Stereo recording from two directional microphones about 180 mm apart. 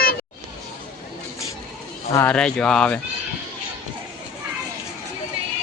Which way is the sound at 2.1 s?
15° left (ahead or behind).